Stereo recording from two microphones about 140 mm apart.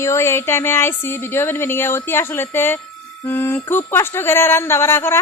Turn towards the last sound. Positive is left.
turn(degrees=15)  # may be behind; listen again after turning